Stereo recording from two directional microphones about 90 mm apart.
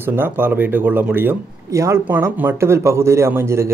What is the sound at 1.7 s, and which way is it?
Speech, 35° right (ahead or behind).